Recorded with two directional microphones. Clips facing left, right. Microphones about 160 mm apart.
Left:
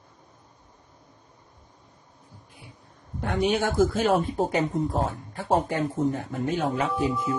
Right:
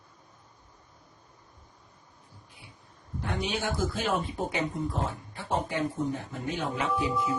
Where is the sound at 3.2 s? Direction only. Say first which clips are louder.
Left 7 dB; 55° left (ahead or behind).